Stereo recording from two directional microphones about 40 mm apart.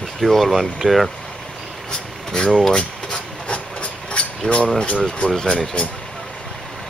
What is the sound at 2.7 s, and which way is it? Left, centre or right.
Filing, centre.